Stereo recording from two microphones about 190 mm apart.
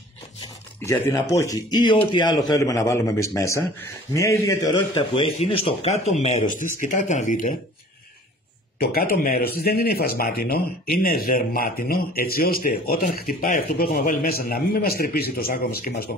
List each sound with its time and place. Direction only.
0.8 s a man's voice: 15° left (ahead or behind); by 7.5 s 40° left (ahead or behind)
8.7 s speech: 50° left (ahead or behind)